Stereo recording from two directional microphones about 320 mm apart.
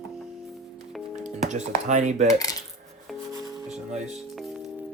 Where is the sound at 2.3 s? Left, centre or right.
Centre.